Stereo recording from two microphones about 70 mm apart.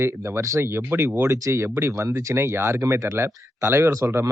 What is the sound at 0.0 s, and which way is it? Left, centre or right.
Speech, right.